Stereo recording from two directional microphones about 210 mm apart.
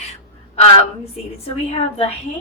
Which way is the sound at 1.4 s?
30° left (ahead or behind).